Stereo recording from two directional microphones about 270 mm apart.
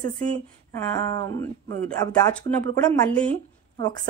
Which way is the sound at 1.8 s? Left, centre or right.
Centre.